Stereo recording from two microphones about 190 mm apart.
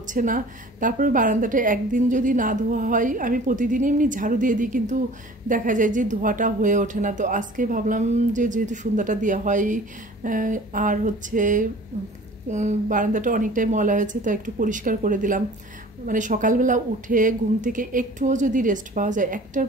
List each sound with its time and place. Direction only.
0.0 s a woman's voice: 45° right (ahead or behind)